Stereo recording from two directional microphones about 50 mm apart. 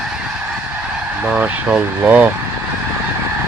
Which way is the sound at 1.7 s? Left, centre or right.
Right.